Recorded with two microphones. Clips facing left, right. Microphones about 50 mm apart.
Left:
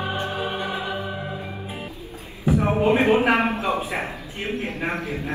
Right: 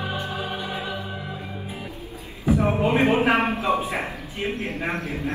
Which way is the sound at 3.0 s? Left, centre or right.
Left.